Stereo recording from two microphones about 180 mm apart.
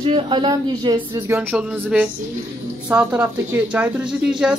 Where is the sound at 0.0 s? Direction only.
30° right (ahead or behind).